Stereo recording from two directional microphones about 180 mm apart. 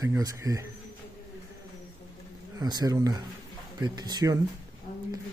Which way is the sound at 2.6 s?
20° right (ahead or behind).